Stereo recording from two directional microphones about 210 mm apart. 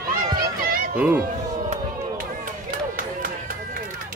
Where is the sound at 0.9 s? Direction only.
10° right (ahead or behind).